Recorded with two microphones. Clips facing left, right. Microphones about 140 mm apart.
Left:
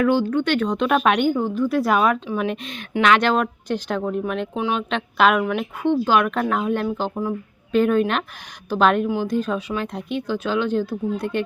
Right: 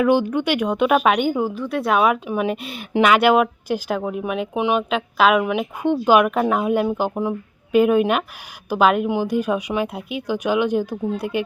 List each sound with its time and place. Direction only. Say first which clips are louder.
0.0 s speech: right 1 dB; 15° right (ahead or behind)
4.9 s a woman's voice: right 1 dB; 5° right (ahead or behind)
5.4 s speech: right 1 dB; 15° right (ahead or behind)
7.8 s speech: right 2 dB; 10° right (ahead or behind)